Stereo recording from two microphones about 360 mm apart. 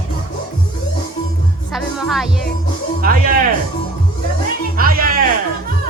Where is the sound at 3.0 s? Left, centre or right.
Right.